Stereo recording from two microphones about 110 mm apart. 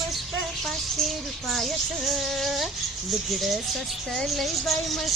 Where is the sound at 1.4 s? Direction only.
Centre (ahead or behind).